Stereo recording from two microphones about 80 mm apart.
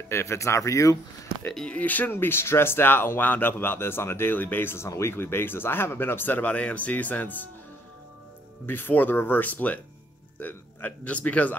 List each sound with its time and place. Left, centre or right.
0.1 s speech: left
1.7 s speech: centre
8.6 s a man's voice: left